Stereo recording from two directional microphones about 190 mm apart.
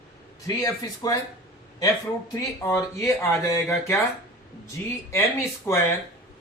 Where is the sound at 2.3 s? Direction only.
15° left (ahead or behind).